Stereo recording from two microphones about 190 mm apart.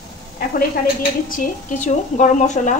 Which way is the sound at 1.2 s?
45° left (ahead or behind).